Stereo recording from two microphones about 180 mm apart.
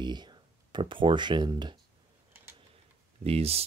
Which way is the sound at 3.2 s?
35° right (ahead or behind).